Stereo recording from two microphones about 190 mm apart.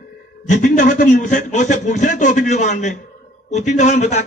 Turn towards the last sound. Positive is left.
turn(degrees=40)  # may be behind; listen again after turning